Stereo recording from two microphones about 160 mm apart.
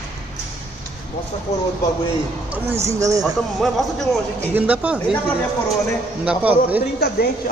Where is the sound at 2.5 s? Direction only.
15° right (ahead or behind).